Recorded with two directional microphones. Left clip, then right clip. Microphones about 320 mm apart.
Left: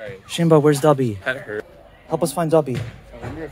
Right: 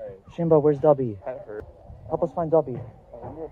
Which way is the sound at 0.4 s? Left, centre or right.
Left.